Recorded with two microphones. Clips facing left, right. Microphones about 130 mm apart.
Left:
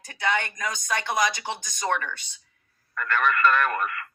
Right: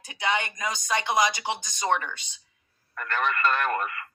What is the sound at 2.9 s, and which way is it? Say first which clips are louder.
Speech: left 3 dB; 30° right (ahead or behind).